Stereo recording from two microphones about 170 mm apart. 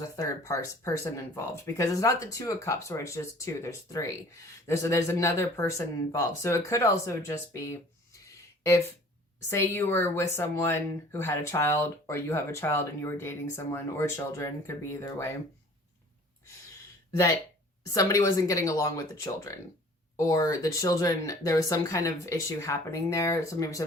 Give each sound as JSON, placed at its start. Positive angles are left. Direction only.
{"t": 0.0, "sound": "speech", "side_deg": 20}
{"t": 17.9, "sound": "speech", "side_deg": 20}